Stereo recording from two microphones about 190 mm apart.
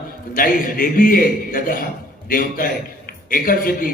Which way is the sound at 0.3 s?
45° left (ahead or behind).